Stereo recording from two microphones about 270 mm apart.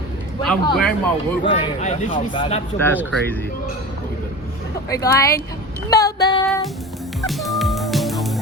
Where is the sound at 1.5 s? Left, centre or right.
Centre.